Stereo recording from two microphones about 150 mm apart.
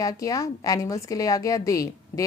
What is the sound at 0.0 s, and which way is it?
A woman's voice, 20° left (ahead or behind).